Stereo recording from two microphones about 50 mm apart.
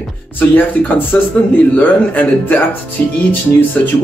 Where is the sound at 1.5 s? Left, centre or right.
Left.